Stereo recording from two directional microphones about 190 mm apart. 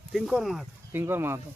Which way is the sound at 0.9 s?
10° right (ahead or behind).